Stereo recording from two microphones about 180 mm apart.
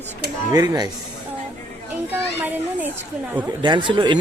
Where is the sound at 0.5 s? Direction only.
20° right (ahead or behind).